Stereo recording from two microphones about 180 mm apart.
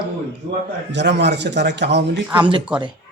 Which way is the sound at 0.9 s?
75° right (ahead or behind).